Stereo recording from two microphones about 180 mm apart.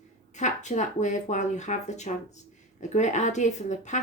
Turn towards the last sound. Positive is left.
turn(degrees=40)  # may be behind; listen again after turning